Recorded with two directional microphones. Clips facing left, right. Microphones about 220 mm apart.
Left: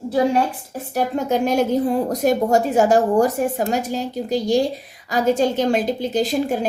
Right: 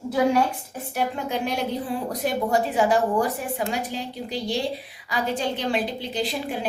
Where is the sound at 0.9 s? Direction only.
45° left (ahead or behind).